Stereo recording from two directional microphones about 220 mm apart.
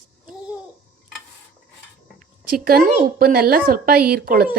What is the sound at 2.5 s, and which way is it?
Speech, 40° right (ahead or behind).